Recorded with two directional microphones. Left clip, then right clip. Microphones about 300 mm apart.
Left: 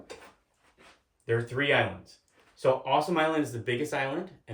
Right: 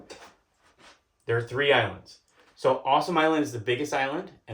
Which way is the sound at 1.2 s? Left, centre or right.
Centre.